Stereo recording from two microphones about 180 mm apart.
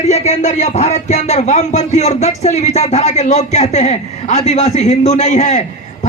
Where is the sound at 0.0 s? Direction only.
40° left (ahead or behind).